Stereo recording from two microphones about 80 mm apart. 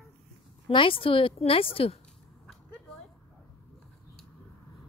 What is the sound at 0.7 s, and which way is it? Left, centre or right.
Speech, left.